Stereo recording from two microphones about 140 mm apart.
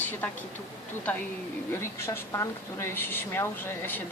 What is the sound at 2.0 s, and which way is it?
A woman's voice, 20° left (ahead or behind).